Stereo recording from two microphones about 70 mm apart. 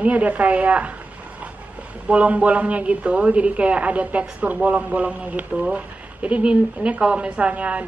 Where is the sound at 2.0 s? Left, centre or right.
Right.